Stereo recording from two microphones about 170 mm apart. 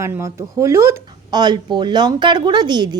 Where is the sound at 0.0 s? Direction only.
15° right (ahead or behind).